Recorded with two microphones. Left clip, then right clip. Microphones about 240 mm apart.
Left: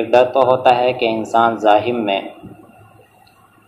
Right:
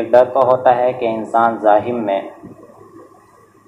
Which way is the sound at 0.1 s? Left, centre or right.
Left.